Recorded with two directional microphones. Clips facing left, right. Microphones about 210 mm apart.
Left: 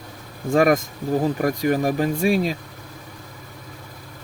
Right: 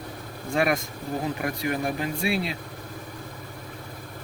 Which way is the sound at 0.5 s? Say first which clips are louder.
Left 7 dB; 40° left (ahead or behind).